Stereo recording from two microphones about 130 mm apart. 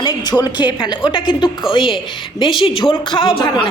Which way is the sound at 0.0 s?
35° left (ahead or behind).